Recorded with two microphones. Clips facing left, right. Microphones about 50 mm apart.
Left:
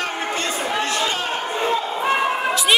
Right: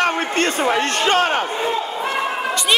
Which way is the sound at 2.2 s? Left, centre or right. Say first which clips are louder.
Left 1 dB; centre.